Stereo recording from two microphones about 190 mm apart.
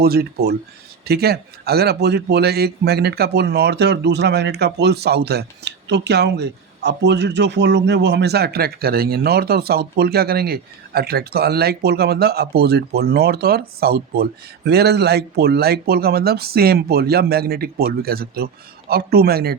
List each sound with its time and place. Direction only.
0.0 s a man's voice: 55° right (ahead or behind)